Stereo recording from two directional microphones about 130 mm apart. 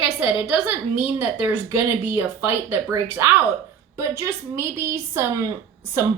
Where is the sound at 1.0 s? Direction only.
15° right (ahead or behind).